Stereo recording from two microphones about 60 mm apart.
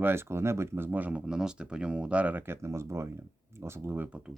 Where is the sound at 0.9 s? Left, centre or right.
Right.